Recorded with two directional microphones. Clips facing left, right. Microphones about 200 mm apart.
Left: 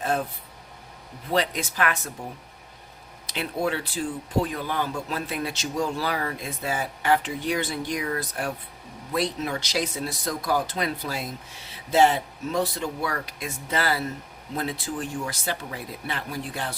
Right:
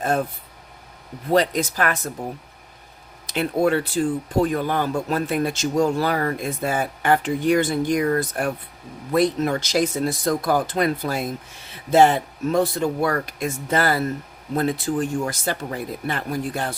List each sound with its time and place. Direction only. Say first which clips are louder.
1.3 s speech: right 6 dB; 40° right (ahead or behind)
3.2 s speech: right 7 dB; 50° right (ahead or behind)